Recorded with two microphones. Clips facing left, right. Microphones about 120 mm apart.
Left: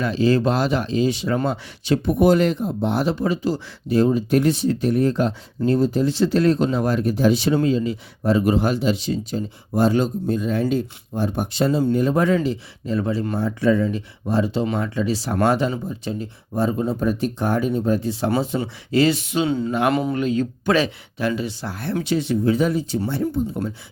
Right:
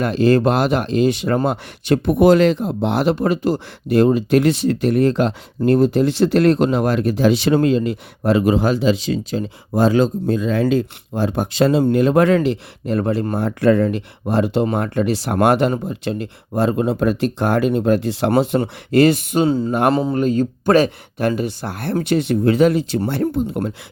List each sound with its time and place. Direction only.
0.0 s speech: 55° right (ahead or behind)
9.0 s speech: 90° right; by 23.7 s 70° right (ahead or behind)